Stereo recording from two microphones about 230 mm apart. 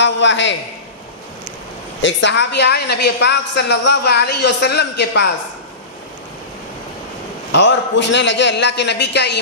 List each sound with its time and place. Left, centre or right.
0.0 s a woman's voice: left
2.0 s a woman's voice: left
7.5 s a woman's voice: left